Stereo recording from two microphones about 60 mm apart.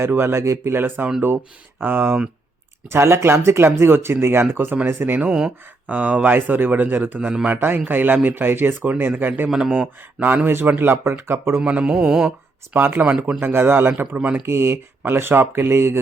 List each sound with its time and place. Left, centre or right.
0.0 s speech: right
2.9 s speech: right
5.2 s mantra: centre
5.9 s speech: right
9.5 s mantra: centre
9.7 s speech: right
11.6 s mantra: right
12.7 s speech: right
13.0 s mantra: right
13.4 s speech: right
14.4 s speech: right